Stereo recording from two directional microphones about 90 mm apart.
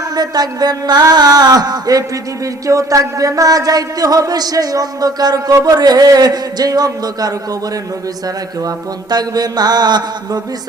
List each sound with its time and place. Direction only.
0.2 s mantra: 50° right (ahead or behind)
8.6 s mantra: 50° right (ahead or behind)